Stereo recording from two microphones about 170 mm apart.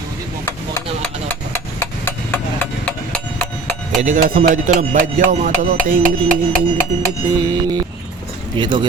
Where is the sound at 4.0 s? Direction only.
50° right (ahead or behind).